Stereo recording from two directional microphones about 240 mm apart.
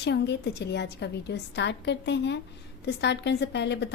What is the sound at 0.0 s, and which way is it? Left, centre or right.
A woman's voice, left.